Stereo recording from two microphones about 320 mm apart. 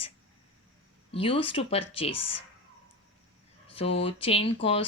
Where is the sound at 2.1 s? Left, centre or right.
Left.